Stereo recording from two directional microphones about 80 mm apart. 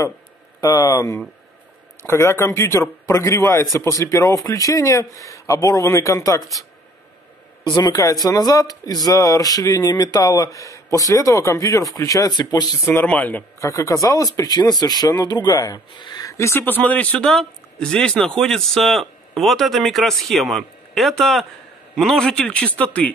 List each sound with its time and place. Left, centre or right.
0.6 s speech: left
2.0 s a man's voice: left
7.6 s speech: left
12.8 s speech: left
13.6 s speech: left
16.0 s a sound: left
16.3 s a man's voice: left; by 23.1 s centre